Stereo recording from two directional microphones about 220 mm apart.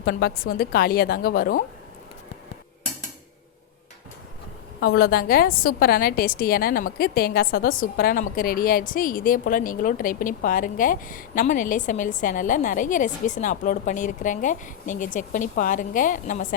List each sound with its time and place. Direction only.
0.0 s a woman's voice: 45° left (ahead or behind)
4.8 s a woman's voice: 45° left (ahead or behind)